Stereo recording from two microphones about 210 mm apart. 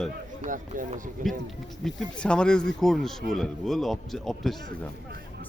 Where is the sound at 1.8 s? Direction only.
5° left (ahead or behind).